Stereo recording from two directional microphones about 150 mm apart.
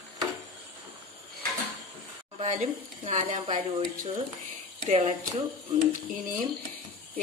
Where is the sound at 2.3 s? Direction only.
50° right (ahead or behind).